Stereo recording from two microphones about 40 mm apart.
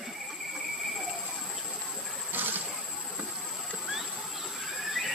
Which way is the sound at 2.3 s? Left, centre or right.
Right.